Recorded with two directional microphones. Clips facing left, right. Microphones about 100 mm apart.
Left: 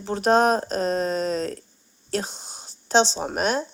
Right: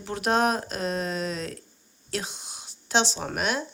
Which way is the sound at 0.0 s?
35° left (ahead or behind).